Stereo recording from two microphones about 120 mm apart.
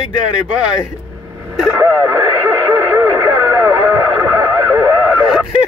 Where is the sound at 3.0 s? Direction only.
25° right (ahead or behind).